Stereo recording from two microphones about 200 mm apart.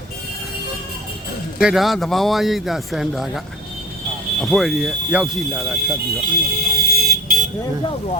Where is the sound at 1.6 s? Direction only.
Centre (ahead or behind).